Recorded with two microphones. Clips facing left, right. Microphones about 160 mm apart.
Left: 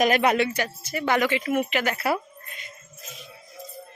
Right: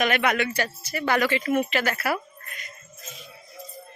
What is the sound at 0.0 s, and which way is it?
Speech, 35° left (ahead or behind).